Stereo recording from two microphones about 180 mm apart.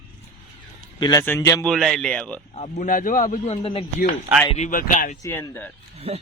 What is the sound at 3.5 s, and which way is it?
Speech, 30° left (ahead or behind).